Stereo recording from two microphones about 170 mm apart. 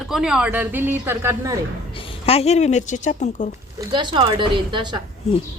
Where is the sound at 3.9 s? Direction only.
30° right (ahead or behind).